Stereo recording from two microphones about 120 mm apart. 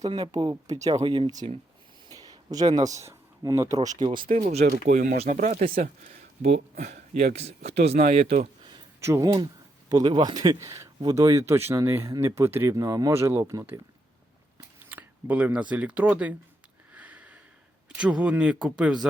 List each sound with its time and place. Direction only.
0.1 s speech: 40° right (ahead or behind)
1.0 s speech: 40° right (ahead or behind)
4.6 s speech: 90° right
6.4 s speech: 70° right (ahead or behind)
9.0 s speech: 25° right (ahead or behind)
14.8 s speech: 15° right (ahead or behind)
16.9 s sniff: 15° right (ahead or behind)
17.8 s speech: 10° right (ahead or behind)